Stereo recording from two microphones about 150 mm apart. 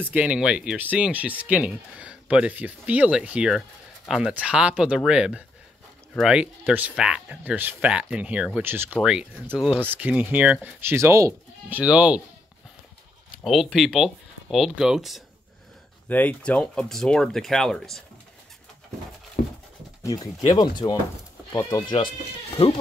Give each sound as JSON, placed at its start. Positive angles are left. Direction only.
{"t": 0.0, "sound": "speech", "side_deg": -10}
{"t": 9.8, "sound": "speech", "side_deg": -10}
{"t": 11.8, "sound": "speech", "side_deg": -10}
{"t": 13.4, "sound": "speech", "side_deg": 0}
{"t": 16.1, "sound": "speech", "side_deg": 10}
{"t": 19.4, "sound": "a sound", "side_deg": 60}
{"t": 20.0, "sound": "speech", "side_deg": 25}